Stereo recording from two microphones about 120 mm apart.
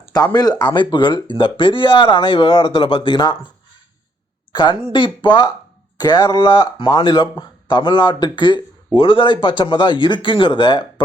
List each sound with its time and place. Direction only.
0.3 s speech: 35° left (ahead or behind)
4.5 s speech: 40° left (ahead or behind)